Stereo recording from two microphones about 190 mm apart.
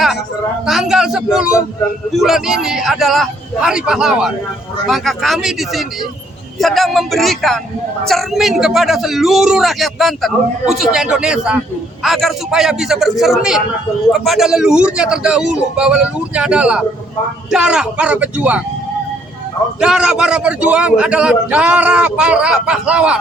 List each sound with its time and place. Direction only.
0.6 s a man's voice: 5° right (ahead or behind)
19.8 s a man's voice: 5° right (ahead or behind)